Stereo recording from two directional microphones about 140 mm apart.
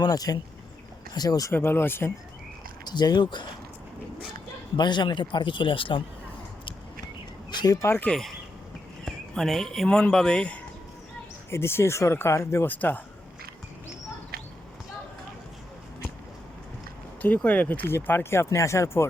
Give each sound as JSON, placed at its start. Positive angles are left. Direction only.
{"t": 0.0, "sound": "speech", "side_deg": 25}
{"t": 2.8, "sound": "speech", "side_deg": 30}
{"t": 4.8, "sound": "speech", "side_deg": 35}
{"t": 7.5, "sound": "speech", "side_deg": 30}
{"t": 9.0, "sound": "speech", "side_deg": 0}
{"t": 11.5, "sound": "speech", "side_deg": 20}
{"t": 17.2, "sound": "speech", "side_deg": 10}